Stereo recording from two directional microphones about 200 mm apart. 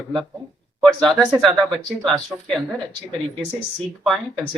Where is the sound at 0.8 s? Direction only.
5° left (ahead or behind).